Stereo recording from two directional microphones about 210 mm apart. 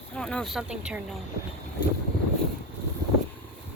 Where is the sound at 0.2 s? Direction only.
5° left (ahead or behind).